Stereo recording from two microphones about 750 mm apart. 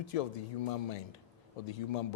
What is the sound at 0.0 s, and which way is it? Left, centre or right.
Speech, left.